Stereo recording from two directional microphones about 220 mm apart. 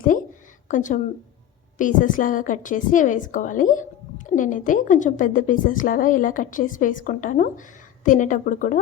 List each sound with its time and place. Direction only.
0.0 s a woman's voice: 35° left (ahead or behind)